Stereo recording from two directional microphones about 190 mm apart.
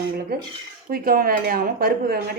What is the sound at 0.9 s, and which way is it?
Speech, 50° right (ahead or behind).